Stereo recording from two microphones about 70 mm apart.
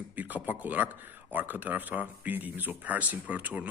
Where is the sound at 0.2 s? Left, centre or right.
Right.